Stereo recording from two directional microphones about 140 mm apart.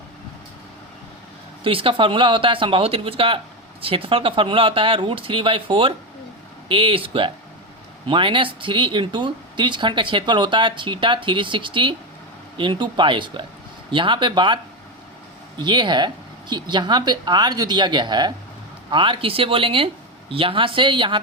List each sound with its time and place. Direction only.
1.6 s speech: 40° right (ahead or behind)